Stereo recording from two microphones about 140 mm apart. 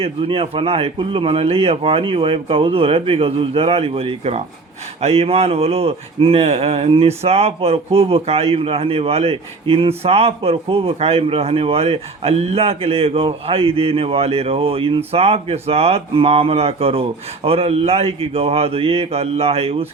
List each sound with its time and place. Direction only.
0.0 s a man's voice: 40° right (ahead or behind)